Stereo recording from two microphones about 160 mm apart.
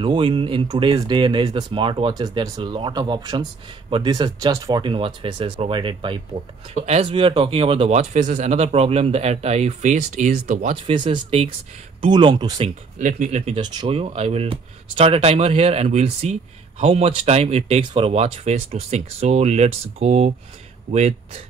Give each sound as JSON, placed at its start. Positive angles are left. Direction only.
{"t": 0.0, "sound": "speech", "side_deg": -35}
{"t": 6.7, "sound": "speech", "side_deg": -40}
{"t": 10.8, "sound": "speech", "side_deg": -35}
{"t": 12.5, "sound": "speech", "side_deg": -45}
{"t": 13.6, "sound": "speech", "side_deg": -30}